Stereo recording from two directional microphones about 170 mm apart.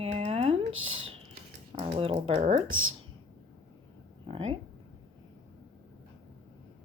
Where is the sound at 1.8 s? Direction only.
35° right (ahead or behind).